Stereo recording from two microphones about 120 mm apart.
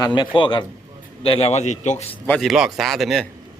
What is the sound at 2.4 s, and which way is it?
Speech, centre (ahead or behind).